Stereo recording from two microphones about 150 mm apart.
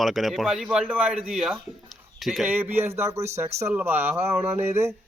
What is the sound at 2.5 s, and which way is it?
Speech, 15° right (ahead or behind).